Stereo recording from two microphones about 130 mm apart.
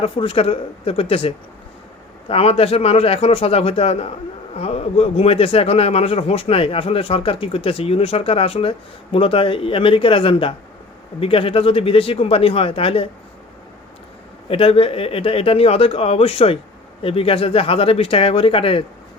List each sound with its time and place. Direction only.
0.0 s a man's voice: 45° left (ahead or behind)
2.3 s a man's voice: 50° left (ahead or behind)
14.4 s a man's voice: 45° left (ahead or behind)